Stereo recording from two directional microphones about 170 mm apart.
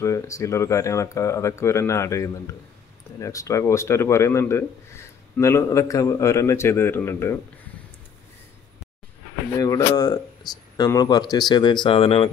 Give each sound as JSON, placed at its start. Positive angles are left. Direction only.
{"t": 0.0, "sound": "speech", "side_deg": 20}
{"t": 9.6, "sound": "speech", "side_deg": 20}